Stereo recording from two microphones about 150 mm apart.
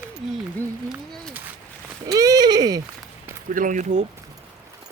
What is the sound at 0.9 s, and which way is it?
Speech, 5° left (ahead or behind).